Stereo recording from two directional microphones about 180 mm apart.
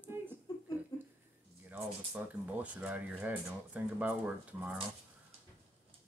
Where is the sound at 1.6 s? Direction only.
10° right (ahead or behind).